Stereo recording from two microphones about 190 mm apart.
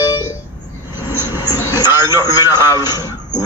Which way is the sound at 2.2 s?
20° left (ahead or behind).